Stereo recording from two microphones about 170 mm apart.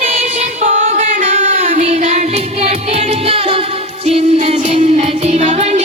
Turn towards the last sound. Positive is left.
turn(degrees=-40)  # may be behind; listen again after turning